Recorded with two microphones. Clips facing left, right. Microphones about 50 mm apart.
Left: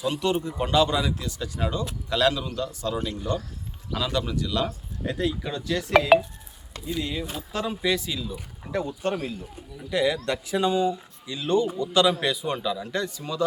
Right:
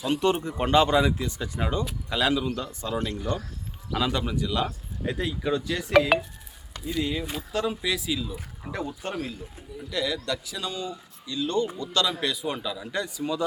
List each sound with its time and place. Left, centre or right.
0.0 s speech: right; by 3.3 s centre
3.9 s speech: right
6.1 s speech: centre
9.9 s speech: left; by 13.4 s centre